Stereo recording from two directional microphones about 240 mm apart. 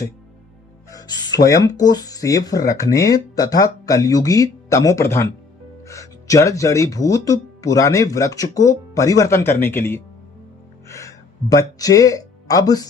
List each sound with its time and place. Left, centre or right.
0.9 s music: centre
1.5 s speech: centre
10.8 s music: centre